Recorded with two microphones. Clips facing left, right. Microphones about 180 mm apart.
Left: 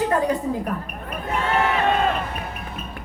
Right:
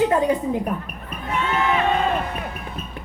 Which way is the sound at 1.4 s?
40° left (ahead or behind).